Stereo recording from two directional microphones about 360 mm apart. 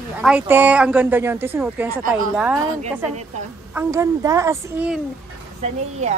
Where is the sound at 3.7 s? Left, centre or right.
Centre.